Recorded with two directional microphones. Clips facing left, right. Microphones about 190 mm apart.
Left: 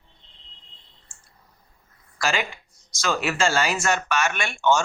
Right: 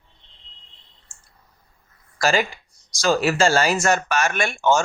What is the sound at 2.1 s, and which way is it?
Speech, 40° right (ahead or behind).